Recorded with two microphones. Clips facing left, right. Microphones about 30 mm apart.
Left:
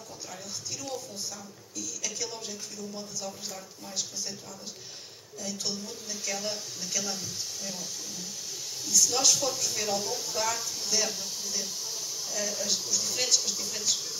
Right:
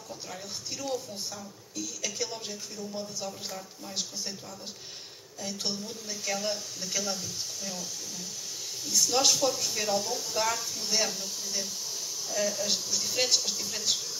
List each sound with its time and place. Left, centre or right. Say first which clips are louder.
0.3 s speech: even; centre
5.4 s speech: right 1 dB; centre
8.8 s speech: even; right; by 13.8 s centre